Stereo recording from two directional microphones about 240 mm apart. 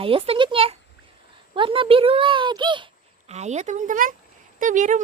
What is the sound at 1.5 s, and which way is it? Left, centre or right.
Speech, right.